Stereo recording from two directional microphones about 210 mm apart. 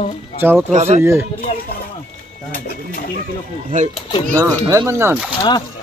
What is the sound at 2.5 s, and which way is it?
Speech, 45° left (ahead or behind).